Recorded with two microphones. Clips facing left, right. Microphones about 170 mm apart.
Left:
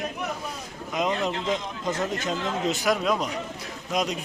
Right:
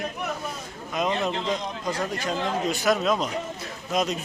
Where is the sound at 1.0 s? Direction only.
20° left (ahead or behind).